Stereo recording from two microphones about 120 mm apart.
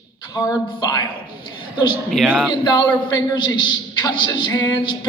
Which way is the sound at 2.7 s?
35° left (ahead or behind).